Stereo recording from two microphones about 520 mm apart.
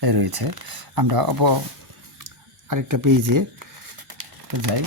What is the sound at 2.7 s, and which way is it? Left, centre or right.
Speech, right.